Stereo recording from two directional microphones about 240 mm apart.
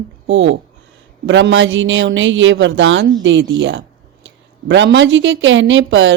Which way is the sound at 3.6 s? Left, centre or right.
Right.